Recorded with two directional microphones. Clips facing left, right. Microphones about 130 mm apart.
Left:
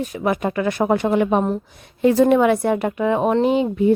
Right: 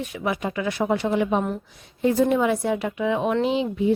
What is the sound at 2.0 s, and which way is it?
Speech, 75° left (ahead or behind).